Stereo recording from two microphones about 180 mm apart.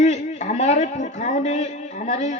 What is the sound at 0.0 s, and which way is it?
A man's voice, 40° left (ahead or behind).